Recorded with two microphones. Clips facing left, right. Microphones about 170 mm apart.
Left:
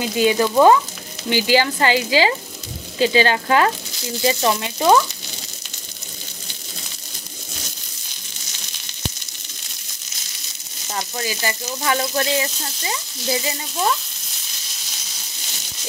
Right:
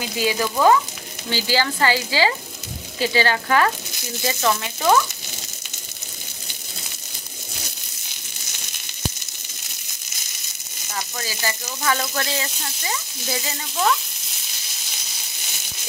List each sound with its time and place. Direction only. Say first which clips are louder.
0.2 s speech: left 5 dB; 20° left (ahead or behind)
10.9 s frying: left 4 dB; 20° left (ahead or behind)
11.9 s speech: left 4 dB; 20° left (ahead or behind)
13.5 s speech: right 4 dB; 15° left (ahead or behind)